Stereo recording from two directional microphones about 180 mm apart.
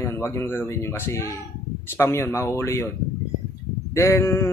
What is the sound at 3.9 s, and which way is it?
Speech, 15° left (ahead or behind).